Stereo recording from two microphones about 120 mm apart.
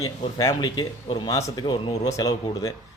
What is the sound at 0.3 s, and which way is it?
Speech, 30° left (ahead or behind).